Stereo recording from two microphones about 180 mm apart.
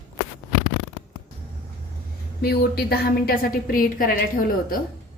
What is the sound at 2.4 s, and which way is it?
A woman's voice, 60° left (ahead or behind).